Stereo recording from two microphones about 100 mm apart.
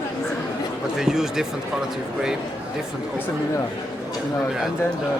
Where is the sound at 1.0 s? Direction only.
5° right (ahead or behind).